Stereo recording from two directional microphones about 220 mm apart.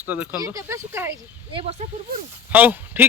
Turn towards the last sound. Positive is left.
turn(degrees=-10)  # may be behind; listen again after turning